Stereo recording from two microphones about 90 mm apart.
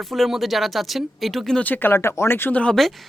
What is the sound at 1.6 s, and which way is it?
Speech, 20° left (ahead or behind).